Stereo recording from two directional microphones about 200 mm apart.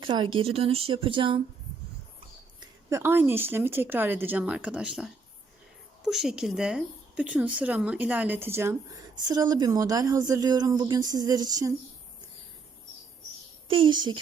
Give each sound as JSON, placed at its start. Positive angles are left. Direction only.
{"t": 0.0, "sound": "speech", "side_deg": -25}
{"t": 2.6, "sound": "speech", "side_deg": -10}
{"t": 13.7, "sound": "speech", "side_deg": -25}